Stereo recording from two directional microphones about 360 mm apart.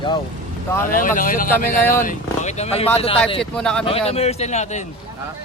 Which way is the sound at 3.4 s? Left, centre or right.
Centre.